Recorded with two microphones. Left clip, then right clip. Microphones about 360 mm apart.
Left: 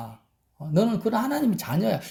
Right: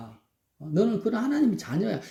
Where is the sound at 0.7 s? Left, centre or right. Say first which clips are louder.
Left 2 dB; left.